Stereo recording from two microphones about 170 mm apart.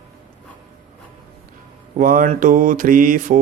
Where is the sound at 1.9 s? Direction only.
55° right (ahead or behind).